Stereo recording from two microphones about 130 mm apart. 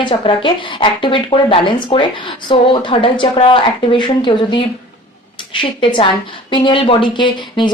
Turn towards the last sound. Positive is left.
turn(degrees=35)  # may be behind; listen again after turning